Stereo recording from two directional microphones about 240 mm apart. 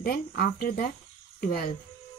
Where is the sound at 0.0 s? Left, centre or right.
Left.